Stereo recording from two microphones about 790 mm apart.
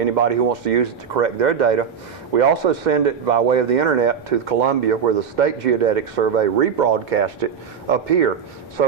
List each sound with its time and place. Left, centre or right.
0.0 s speech: right